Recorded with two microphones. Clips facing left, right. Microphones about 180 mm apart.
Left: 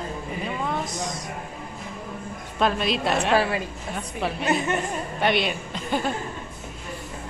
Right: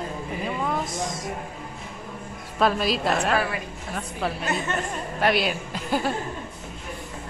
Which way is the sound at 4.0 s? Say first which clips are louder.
Even; centre (ahead or behind).